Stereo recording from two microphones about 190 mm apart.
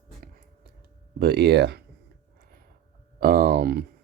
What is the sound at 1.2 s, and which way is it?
Speech, 60° right (ahead or behind).